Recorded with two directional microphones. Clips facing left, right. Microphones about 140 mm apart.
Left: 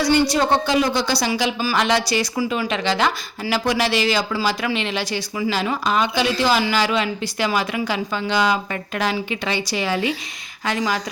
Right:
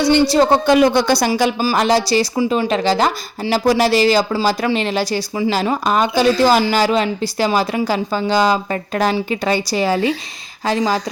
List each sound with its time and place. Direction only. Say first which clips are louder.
0.0 s speech: right 5 dB; 25° right (ahead or behind)
0.6 s speech: right 7 dB; 60° right (ahead or behind); by 11.0 s 30° right (ahead or behind)